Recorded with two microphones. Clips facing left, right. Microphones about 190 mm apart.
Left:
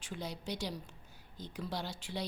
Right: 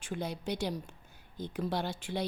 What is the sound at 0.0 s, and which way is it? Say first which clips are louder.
A woman's voice: right 5 dB; 55° right (ahead or behind).